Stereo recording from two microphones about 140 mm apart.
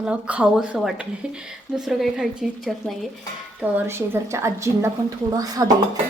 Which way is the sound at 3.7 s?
20° right (ahead or behind).